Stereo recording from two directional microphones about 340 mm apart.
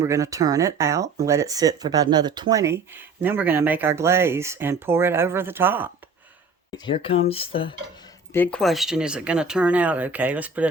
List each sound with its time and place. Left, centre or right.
0.0 s speech: centre
6.7 s speech: centre
8.3 s speech: centre